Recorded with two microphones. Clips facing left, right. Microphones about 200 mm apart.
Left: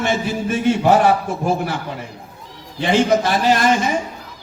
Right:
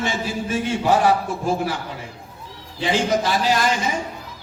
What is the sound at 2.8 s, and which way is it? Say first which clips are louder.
Speech: left 4 dB; 60° left (ahead or behind).